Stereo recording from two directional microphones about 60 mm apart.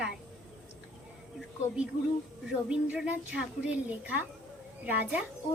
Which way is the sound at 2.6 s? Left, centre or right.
Centre.